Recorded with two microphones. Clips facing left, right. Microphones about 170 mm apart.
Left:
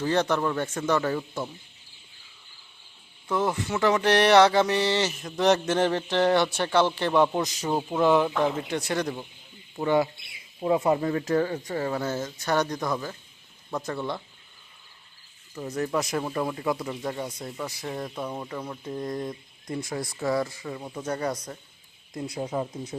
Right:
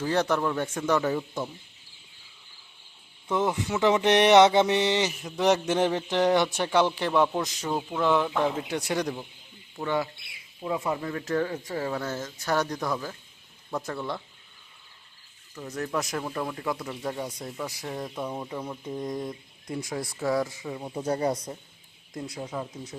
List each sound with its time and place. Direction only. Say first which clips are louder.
0.0 s speech: left 1 dB; 5° right (ahead or behind)
3.2 s speech: even; 15° right (ahead or behind)
7.1 s speech: left 2 dB; centre (ahead or behind)
7.6 s speech: left 3 dB; 20° left (ahead or behind)
8.0 s speech: left 3 dB; 10° left (ahead or behind)
8.4 s speech: left 1 dB; 5° right (ahead or behind)
9.7 s speech: left 5 dB; 15° left (ahead or behind)
10.6 s speech: left 6 dB; 40° left (ahead or behind)
11.3 s speech: right 1 dB; 5° left (ahead or behind)
15.5 s speech: left 3 dB; 10° left (ahead or behind); by 20.9 s 10° right (ahead or behind)
20.9 s speech: right 3 dB; 30° right (ahead or behind)
22.4 s speech: left 6 dB; 30° left (ahead or behind)